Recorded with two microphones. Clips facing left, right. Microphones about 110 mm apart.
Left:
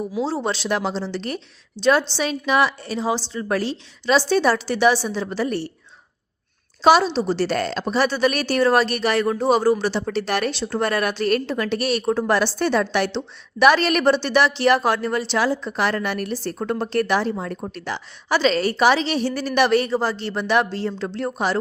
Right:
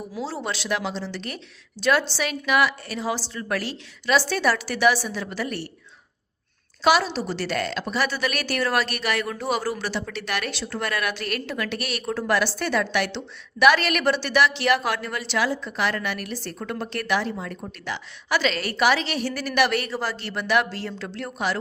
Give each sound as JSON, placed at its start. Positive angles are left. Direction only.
{"t": 0.2, "sound": "a woman's voice", "side_deg": 25}
{"t": 6.8, "sound": "a woman's voice", "side_deg": 30}